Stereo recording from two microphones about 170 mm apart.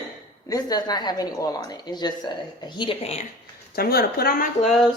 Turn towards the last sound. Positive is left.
turn(degrees=0)  # may be behind; listen again after turning